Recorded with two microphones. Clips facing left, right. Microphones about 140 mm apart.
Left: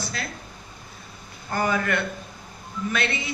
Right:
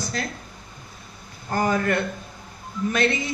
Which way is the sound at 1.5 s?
40° right (ahead or behind).